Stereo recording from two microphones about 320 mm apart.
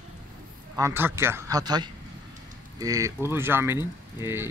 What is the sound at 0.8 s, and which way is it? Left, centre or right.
Speech, centre.